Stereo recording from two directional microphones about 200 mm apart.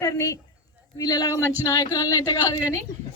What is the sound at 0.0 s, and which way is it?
A woman's voice, 15° left (ahead or behind).